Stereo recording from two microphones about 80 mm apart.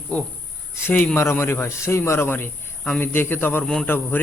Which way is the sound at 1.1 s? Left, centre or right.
Left.